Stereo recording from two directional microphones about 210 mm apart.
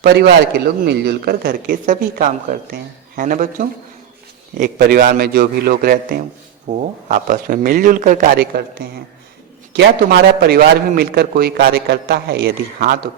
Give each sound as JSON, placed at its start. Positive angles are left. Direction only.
{"t": 0.0, "sound": "a man's voice", "side_deg": -50}
{"t": 9.7, "sound": "a man's voice", "side_deg": -50}